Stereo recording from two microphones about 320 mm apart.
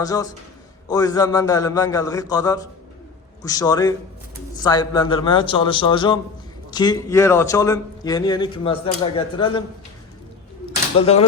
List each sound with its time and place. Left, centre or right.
0.0 s a man's voice: centre
11.0 s speech: centre